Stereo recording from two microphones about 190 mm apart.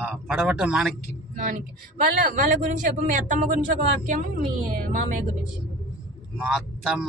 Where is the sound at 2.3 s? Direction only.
45° right (ahead or behind).